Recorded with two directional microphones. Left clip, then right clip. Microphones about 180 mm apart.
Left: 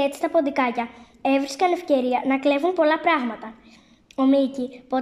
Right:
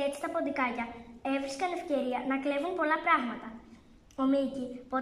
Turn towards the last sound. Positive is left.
turn(degrees=30)  # may be behind; listen again after turning